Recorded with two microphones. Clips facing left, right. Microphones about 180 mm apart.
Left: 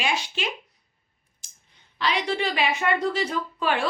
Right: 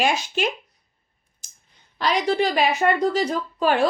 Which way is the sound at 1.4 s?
45° right (ahead or behind).